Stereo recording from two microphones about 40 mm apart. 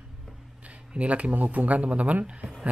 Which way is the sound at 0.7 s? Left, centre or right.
Right.